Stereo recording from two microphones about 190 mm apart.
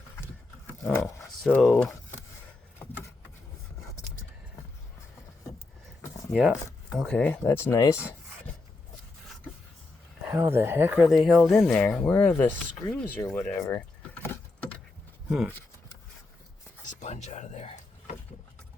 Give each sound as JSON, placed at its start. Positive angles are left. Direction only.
{"t": 0.7, "sound": "dog", "side_deg": 10}
{"t": 1.6, "sound": "speech", "side_deg": 5}
{"t": 6.9, "sound": "speech", "side_deg": 5}
{"t": 10.2, "sound": "speech", "side_deg": -10}
{"t": 15.3, "sound": "speech", "side_deg": -5}
{"t": 16.8, "sound": "a sound", "side_deg": 40}